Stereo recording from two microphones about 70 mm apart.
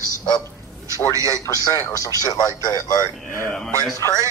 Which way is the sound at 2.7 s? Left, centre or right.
Left.